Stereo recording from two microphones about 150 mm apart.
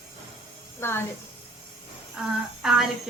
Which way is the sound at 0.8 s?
15° left (ahead or behind).